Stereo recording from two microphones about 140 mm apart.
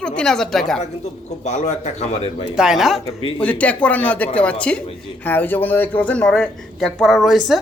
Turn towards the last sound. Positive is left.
turn(degrees=0)  # may be behind; listen again after turning